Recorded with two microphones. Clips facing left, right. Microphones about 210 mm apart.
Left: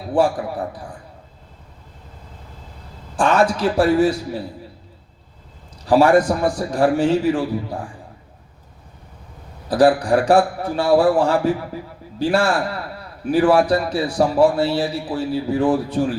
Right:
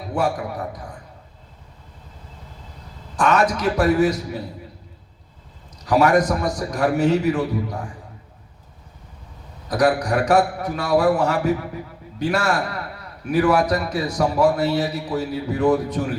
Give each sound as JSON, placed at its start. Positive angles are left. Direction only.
{"t": 0.1, "sound": "a man's voice", "side_deg": 30}
{"t": 3.2, "sound": "a man's voice", "side_deg": 30}
{"t": 5.8, "sound": "a man's voice", "side_deg": 30}
{"t": 9.6, "sound": "a man's voice", "side_deg": 30}